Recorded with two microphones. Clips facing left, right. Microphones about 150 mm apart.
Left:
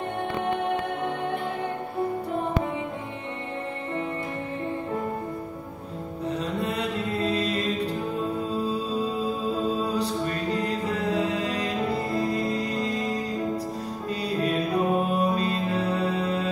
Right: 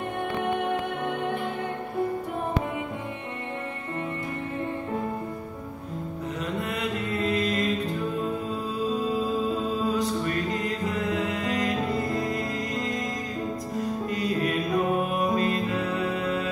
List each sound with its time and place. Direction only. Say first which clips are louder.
6.2 s music: left 4 dB; 30° left (ahead or behind)
9.7 s music: even; 30° left (ahead or behind)
14.1 s music: left 2 dB; 30° left (ahead or behind)